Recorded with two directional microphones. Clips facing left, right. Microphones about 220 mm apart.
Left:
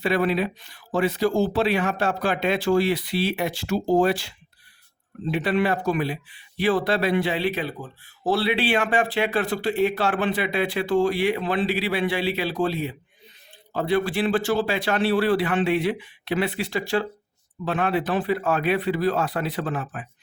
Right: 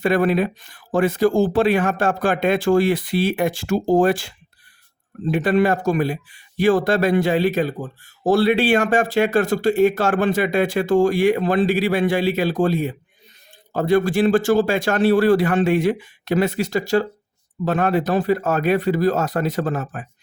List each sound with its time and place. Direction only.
0.0 s speech: 50° right (ahead or behind)